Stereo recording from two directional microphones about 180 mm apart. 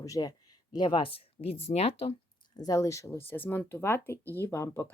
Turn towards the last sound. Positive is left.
turn(degrees=15)  # may be behind; listen again after turning